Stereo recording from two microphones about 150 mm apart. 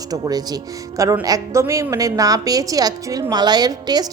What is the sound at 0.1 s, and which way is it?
A woman's voice, 25° right (ahead or behind).